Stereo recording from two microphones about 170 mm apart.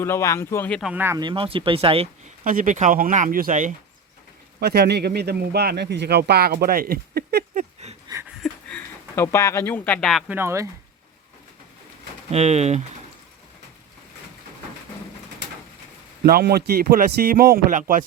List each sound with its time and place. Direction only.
0.0 s speech: 15° left (ahead or behind)
0.8 s speech: 5° right (ahead or behind)
1.0 s speech: 20° right (ahead or behind)
2.4 s speech: 50° right (ahead or behind)
4.6 s speech: 70° right (ahead or behind)
8.4 s a sound: 10° left (ahead or behind)
10.2 s speech: 15° right (ahead or behind)
12.3 s speech: 40° right (ahead or behind)
16.2 s a man's voice: 65° right (ahead or behind)